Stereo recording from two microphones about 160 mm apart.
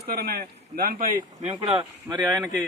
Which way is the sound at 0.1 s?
80° right.